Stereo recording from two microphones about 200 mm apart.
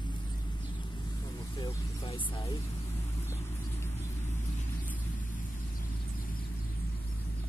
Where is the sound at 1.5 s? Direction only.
25° left (ahead or behind).